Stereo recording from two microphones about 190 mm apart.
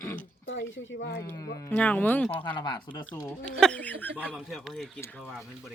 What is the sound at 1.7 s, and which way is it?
Speech, 10° left (ahead or behind).